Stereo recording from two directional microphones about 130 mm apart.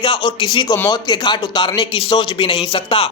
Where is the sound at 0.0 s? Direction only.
40° left (ahead or behind).